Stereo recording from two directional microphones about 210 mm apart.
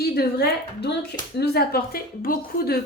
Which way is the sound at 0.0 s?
50° left (ahead or behind).